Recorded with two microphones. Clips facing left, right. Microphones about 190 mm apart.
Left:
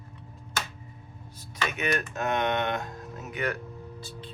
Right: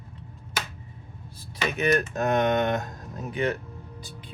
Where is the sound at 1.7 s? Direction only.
35° right (ahead or behind).